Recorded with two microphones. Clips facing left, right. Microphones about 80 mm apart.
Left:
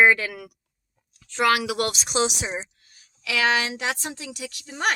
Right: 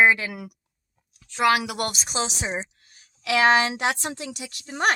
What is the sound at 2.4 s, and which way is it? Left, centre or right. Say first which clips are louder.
A woman's voice: right 1 dB; right.